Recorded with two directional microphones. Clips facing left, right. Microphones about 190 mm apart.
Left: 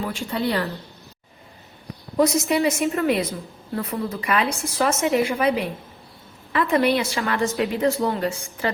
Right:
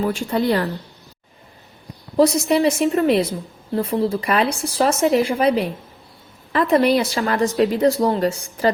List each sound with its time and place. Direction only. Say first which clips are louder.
0.0 s speech: right 5 dB; 45° right (ahead or behind)
2.1 s a woman's voice: right 4 dB; 30° right (ahead or behind)